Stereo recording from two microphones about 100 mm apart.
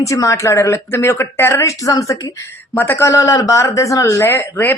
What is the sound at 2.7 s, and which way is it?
Speech, 20° left (ahead or behind).